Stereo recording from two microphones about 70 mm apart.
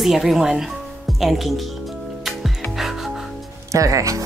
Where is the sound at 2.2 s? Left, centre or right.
Centre.